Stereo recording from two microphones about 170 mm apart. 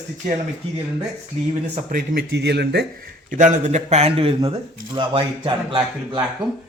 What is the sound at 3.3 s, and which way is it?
A man's voice, 45° right (ahead or behind).